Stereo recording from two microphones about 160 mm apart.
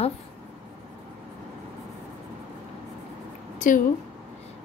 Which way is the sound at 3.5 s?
55° left (ahead or behind).